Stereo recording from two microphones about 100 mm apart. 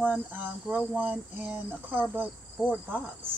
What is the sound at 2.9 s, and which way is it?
Insect, 20° right (ahead or behind).